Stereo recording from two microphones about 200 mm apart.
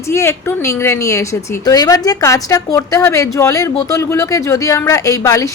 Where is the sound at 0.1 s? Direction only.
15° left (ahead or behind).